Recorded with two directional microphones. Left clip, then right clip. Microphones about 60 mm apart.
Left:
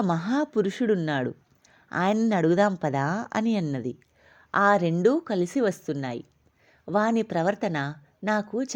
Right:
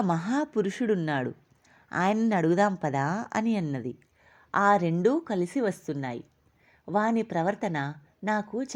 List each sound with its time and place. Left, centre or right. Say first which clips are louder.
0.0 s a woman's voice: left 2 dB; left